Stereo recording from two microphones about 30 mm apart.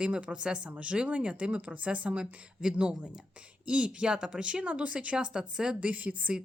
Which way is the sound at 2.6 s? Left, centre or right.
Right.